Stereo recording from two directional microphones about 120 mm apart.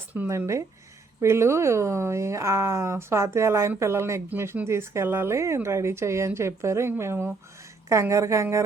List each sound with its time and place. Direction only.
0.1 s speech: 20° right (ahead or behind)